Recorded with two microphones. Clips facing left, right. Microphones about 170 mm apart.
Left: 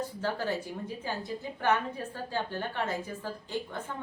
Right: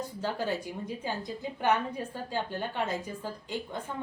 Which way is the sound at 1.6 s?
15° right (ahead or behind).